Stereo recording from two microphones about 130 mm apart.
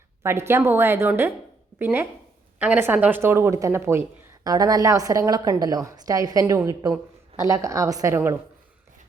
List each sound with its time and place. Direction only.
0.2 s a woman's voice: 20° right (ahead or behind)